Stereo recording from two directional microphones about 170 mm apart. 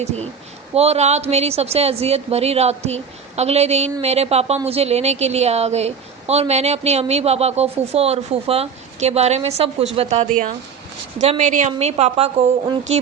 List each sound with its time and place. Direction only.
0.7 s a woman's voice: 40° right (ahead or behind)